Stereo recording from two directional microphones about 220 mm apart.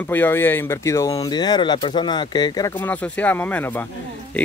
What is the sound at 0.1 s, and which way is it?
Speech, 10° left (ahead or behind).